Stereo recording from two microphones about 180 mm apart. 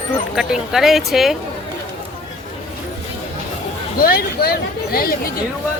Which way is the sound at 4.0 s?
55° left (ahead or behind).